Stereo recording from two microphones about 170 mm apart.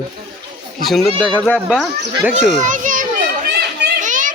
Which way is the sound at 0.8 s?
Centre (ahead or behind).